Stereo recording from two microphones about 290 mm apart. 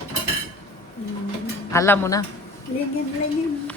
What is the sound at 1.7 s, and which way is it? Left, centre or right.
Speech, centre.